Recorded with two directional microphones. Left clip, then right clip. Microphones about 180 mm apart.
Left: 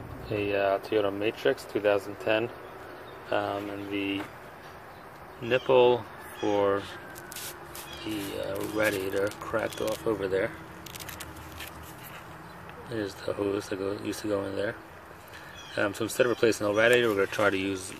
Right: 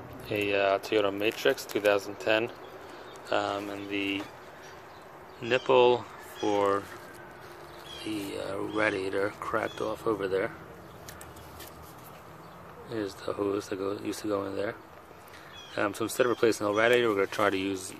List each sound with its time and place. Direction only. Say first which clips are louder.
0.3 s speech: even; 5° right (ahead or behind)
5.5 s speech: left 1 dB; 5° right (ahead or behind)
8.0 s speech: left 1 dB; 5° right (ahead or behind)
12.9 s speech: left 1 dB; centre (ahead or behind)